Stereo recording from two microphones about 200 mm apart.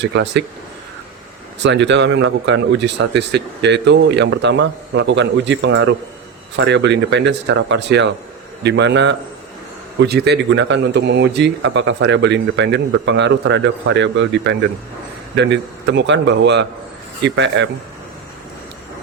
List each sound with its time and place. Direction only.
0.0 s a man's voice: 60° right (ahead or behind)
1.6 s a man's voice: 60° right (ahead or behind)